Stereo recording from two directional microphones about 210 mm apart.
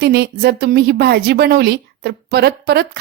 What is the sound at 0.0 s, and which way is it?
A woman's voice, 50° right (ahead or behind).